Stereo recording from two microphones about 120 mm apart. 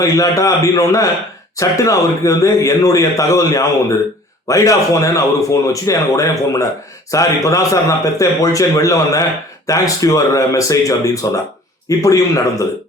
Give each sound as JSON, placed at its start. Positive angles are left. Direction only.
{"t": 0.0, "sound": "speech", "side_deg": 30}